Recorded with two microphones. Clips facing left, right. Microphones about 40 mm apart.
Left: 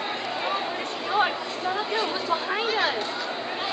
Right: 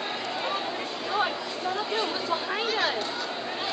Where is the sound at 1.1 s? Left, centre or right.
Centre.